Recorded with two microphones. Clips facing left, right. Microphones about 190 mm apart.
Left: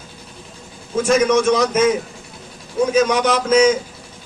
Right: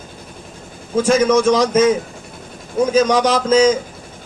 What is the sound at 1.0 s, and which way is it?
Speech, 30° right (ahead or behind).